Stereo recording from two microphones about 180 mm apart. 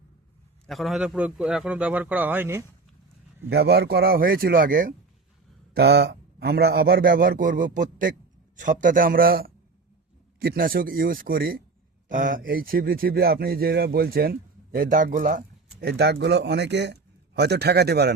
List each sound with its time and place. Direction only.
0.7 s a man's voice: centre (ahead or behind)
3.5 s speech: 65° right (ahead or behind)
5.7 s a man's voice: 65° right (ahead or behind)